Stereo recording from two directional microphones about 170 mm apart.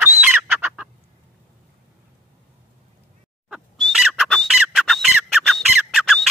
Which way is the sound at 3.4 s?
Centre (ahead or behind).